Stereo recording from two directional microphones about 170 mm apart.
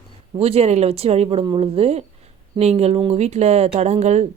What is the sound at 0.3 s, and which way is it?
Speech, 35° right (ahead or behind).